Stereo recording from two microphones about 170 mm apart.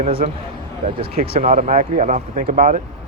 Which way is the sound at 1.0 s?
60° right (ahead or behind).